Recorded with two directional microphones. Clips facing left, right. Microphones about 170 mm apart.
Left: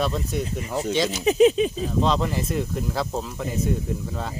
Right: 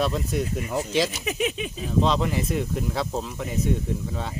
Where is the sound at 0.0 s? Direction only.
Centre (ahead or behind).